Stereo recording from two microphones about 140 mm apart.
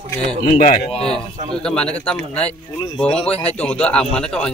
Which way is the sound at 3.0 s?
5° left (ahead or behind).